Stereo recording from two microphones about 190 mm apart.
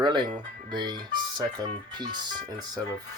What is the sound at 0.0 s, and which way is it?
Speech, 25° right (ahead or behind).